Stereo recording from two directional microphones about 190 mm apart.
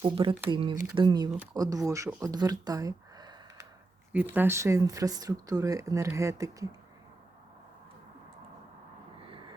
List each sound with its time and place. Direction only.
0.0 s speech: 30° right (ahead or behind); by 2.3 s 15° right (ahead or behind)
2.3 s a sound: 20° right (ahead or behind)
4.1 s speech: 10° right (ahead or behind)